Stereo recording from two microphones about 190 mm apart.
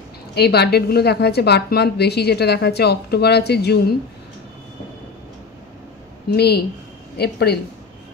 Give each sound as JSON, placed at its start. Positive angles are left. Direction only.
{"t": 0.3, "sound": "a woman's voice", "side_deg": 60}
{"t": 6.3, "sound": "a woman's voice", "side_deg": 60}